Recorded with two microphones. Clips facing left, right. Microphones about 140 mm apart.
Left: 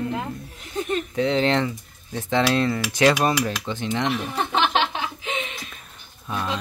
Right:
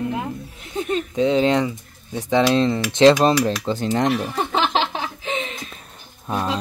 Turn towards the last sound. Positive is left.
turn(degrees=-35)  # may be behind; listen again after turning